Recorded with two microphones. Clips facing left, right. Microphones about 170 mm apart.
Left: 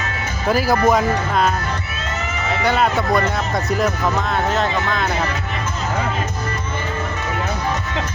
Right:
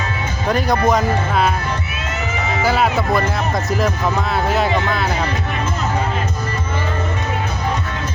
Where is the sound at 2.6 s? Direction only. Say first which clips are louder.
Even; 5° right (ahead or behind).